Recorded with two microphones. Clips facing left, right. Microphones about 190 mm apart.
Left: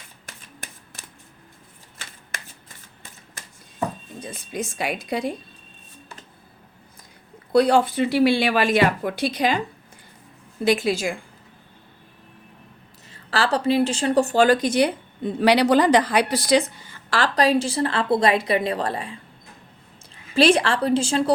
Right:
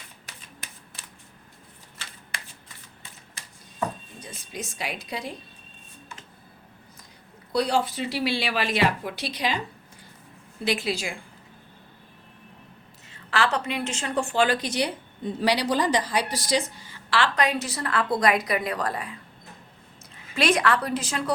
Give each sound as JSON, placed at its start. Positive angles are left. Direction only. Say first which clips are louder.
{"t": 0.3, "sound": "shuffling cards", "louder": "left 5 dB", "side_deg": 50}
{"t": 2.3, "sound": "shuffling cards", "louder": "left 2 dB", "side_deg": 45}
{"t": 3.4, "sound": "a sound", "louder": "left 4 dB", "side_deg": 45}
{"t": 4.2, "sound": "speech", "louder": "left 8 dB", "side_deg": 55}
{"t": 7.5, "sound": "speech", "louder": "left 7 dB", "side_deg": 55}
{"t": 10.6, "sound": "speech", "louder": "left 7 dB", "side_deg": 45}
{"t": 13.1, "sound": "a woman's voice", "louder": "left 3 dB", "side_deg": 35}
{"t": 15.4, "sound": "a woman's voice", "louder": "left 7 dB", "side_deg": 60}
{"t": 17.1, "sound": "a woman's voice", "louder": "left 4 dB", "side_deg": 40}
{"t": 20.3, "sound": "a woman's voice", "louder": "left 5 dB", "side_deg": 30}